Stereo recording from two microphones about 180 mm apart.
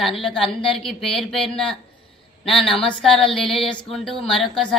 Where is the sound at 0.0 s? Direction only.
Centre (ahead or behind).